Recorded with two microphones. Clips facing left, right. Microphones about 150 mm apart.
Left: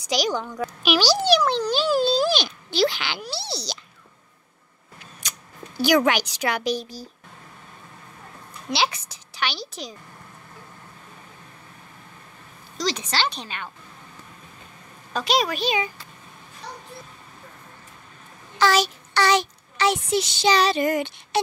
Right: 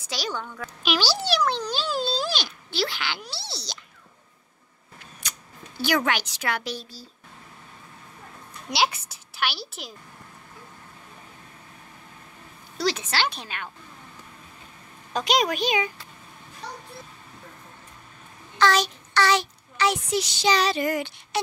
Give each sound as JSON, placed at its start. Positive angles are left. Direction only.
{"t": 0.1, "sound": "a child's voice", "side_deg": 15}
{"t": 5.8, "sound": "a child's voice", "side_deg": 15}
{"t": 8.7, "sound": "a woman's voice", "side_deg": -10}
{"t": 12.7, "sound": "a woman's voice", "side_deg": -10}
{"t": 15.1, "sound": "a woman's voice", "side_deg": -15}
{"t": 18.6, "sound": "child singing", "side_deg": 5}
{"t": 19.2, "sound": "a child's voice", "side_deg": 20}